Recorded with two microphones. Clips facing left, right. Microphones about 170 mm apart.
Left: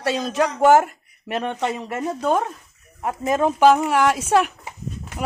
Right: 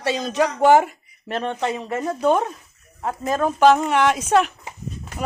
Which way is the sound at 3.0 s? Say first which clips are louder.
Left 2 dB; 20° left (ahead or behind).